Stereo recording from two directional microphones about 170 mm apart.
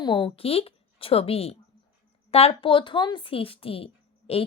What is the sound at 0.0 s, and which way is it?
A woman's voice, 25° left (ahead or behind).